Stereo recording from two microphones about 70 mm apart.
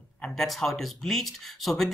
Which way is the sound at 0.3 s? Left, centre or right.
Centre.